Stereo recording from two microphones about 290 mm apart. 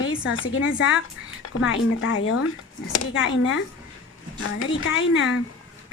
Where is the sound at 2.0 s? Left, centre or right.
Left.